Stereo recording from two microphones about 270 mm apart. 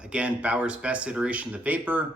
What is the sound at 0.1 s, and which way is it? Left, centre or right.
Speech, centre.